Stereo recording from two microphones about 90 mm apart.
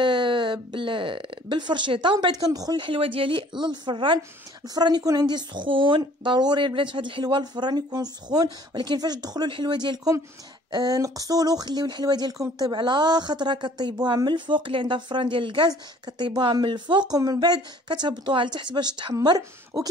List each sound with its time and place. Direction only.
0.0 s a woman's voice: 60° right (ahead or behind)
2.4 s a woman's voice: 45° right (ahead or behind)
2.8 s speech: 75° right (ahead or behind)
3.6 s a woman's voice: 60° right (ahead or behind)
4.7 s a woman's voice: 50° right (ahead or behind)
10.7 s a woman's voice: 45° right (ahead or behind); by 15.7 s 70° right (ahead or behind)
16.1 s a woman's voice: 55° right (ahead or behind)
17.1 s a woman's voice: 45° right (ahead or behind)